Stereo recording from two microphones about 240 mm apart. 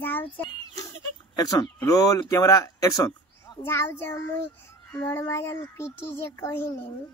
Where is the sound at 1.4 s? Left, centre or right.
Centre.